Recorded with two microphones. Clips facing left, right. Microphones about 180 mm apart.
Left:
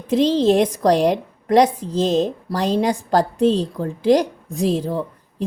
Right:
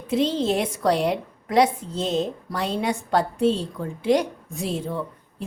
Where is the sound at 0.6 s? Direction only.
40° left (ahead or behind).